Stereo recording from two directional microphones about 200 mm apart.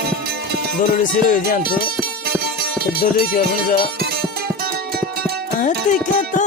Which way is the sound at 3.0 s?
50° left (ahead or behind).